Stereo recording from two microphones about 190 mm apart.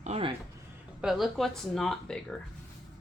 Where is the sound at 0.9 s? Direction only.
Centre (ahead or behind).